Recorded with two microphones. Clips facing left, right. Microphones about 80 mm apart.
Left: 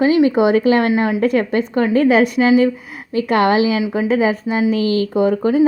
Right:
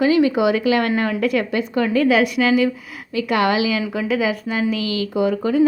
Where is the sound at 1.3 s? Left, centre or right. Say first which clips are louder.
Left 4 dB; left.